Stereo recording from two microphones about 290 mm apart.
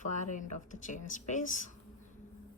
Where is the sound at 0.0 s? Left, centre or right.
Left.